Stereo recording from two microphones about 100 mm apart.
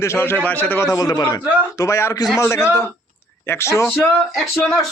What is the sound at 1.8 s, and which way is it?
Speech, 30° left (ahead or behind).